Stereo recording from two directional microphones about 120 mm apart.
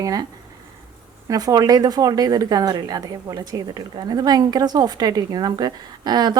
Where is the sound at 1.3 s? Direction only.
30° right (ahead or behind).